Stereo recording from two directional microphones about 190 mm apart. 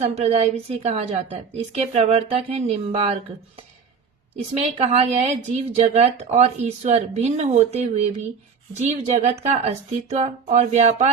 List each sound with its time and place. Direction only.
0.0 s speech: 35° right (ahead or behind)
4.6 s speech: 35° right (ahead or behind)